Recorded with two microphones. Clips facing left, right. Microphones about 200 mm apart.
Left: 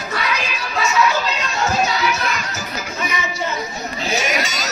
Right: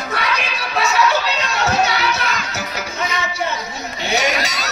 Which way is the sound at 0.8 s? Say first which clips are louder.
Right 1 dB; 65° right (ahead or behind).